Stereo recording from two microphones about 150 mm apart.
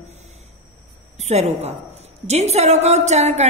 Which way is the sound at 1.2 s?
45° right (ahead or behind).